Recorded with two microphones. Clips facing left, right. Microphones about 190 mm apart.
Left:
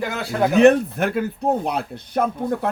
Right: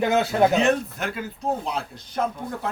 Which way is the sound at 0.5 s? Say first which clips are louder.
Left 7 dB; 60° left (ahead or behind).